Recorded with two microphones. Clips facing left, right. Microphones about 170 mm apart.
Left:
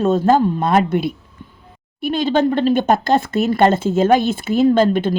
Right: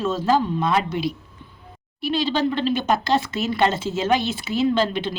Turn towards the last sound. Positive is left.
turn(degrees=50)  # may be behind; listen again after turning